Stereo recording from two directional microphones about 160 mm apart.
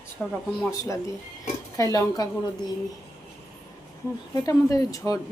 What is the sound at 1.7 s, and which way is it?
Speech, 20° left (ahead or behind).